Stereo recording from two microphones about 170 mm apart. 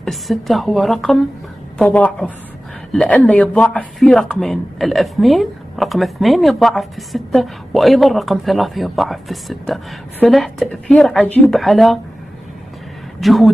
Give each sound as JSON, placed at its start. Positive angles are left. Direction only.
{"t": 0.0, "sound": "a man's voice", "side_deg": 0}
{"t": 13.2, "sound": "a man's voice", "side_deg": 0}